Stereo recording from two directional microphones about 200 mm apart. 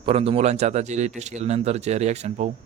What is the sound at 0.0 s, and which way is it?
Speech, 30° right (ahead or behind).